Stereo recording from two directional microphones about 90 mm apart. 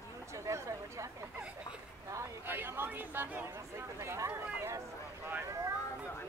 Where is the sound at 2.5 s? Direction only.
25° right (ahead or behind).